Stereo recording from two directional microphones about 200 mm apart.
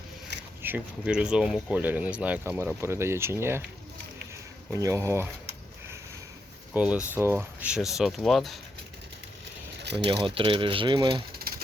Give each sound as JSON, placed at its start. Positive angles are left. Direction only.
{"t": 0.6, "sound": "speech", "side_deg": -5}
{"t": 4.7, "sound": "speech", "side_deg": -15}
{"t": 6.7, "sound": "speech", "side_deg": -5}
{"t": 9.8, "sound": "a sound", "side_deg": -55}
{"t": 10.1, "sound": "speech", "side_deg": -25}
{"t": 11.3, "sound": "typewriter", "side_deg": -50}